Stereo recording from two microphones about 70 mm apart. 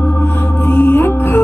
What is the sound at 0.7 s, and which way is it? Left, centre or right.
Music, left.